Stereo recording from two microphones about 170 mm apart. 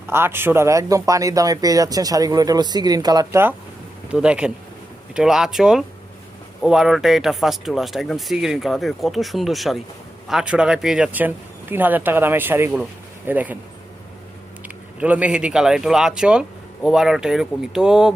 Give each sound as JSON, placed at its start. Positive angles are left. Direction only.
{"t": 0.1, "sound": "speech", "side_deg": -15}
{"t": 4.1, "sound": "speech", "side_deg": -5}
{"t": 14.9, "sound": "speech", "side_deg": -10}